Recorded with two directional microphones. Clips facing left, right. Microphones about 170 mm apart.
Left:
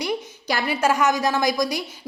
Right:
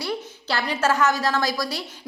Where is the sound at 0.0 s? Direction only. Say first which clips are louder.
Left 3 dB; 15° left (ahead or behind).